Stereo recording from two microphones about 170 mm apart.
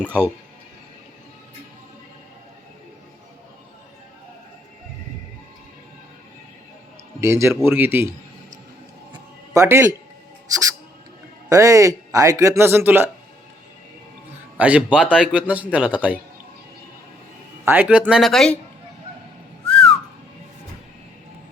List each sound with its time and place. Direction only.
7.2 s speech: 15° right (ahead or behind)
9.6 s speech: 15° right (ahead or behind)
11.4 s speech: 20° right (ahead or behind)
14.6 s speech: 5° right (ahead or behind)
17.7 s speech: 10° right (ahead or behind)
19.6 s whistling: 5° left (ahead or behind)